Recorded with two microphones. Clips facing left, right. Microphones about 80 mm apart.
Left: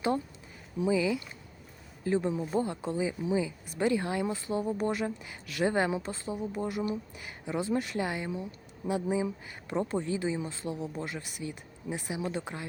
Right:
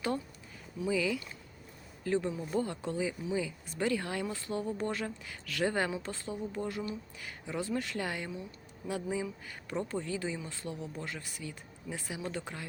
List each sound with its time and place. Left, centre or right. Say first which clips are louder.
0.8 s speech: left 4 dB; centre